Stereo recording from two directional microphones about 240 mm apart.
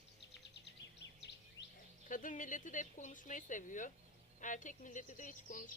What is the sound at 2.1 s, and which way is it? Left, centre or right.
Speech, left.